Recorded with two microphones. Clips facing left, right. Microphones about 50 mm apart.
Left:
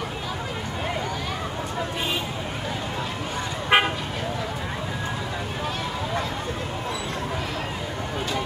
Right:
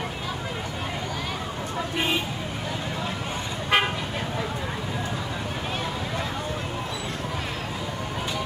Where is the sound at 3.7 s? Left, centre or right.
Left.